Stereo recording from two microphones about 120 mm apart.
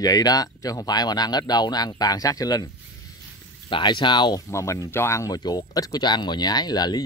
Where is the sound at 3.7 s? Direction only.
45° left (ahead or behind).